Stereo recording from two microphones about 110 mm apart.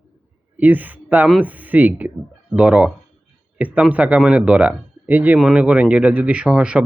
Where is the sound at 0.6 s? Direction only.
15° right (ahead or behind).